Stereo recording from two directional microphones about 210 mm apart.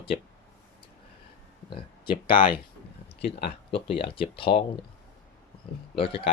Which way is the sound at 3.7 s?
25° left (ahead or behind).